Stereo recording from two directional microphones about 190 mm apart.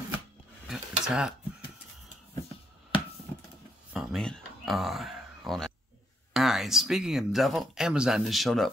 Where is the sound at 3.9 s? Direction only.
5° right (ahead or behind).